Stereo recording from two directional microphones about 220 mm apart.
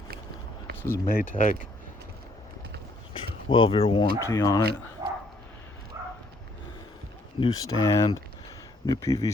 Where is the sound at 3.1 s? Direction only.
25° left (ahead or behind).